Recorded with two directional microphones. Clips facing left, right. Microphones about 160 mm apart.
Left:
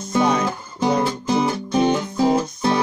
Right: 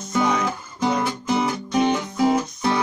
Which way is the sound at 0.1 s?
30° left (ahead or behind).